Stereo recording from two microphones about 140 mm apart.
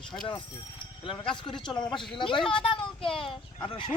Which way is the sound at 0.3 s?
35° left (ahead or behind).